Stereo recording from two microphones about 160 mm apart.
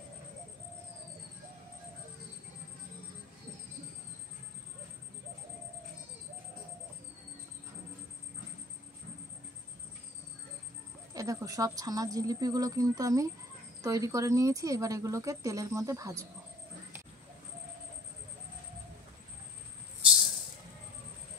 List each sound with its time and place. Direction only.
11.1 s speech: 20° right (ahead or behind)